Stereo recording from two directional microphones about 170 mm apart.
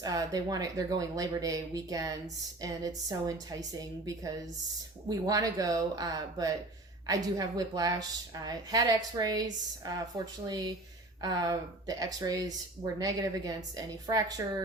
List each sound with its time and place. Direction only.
0.0 s speech: 20° right (ahead or behind)